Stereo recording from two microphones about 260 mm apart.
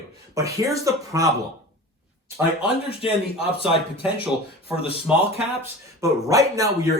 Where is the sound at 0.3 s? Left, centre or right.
Centre.